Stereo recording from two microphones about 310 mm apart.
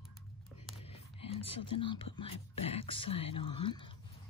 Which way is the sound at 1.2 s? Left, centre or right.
Centre.